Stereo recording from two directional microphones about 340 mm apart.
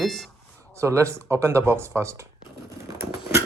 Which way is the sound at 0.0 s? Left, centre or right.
Centre.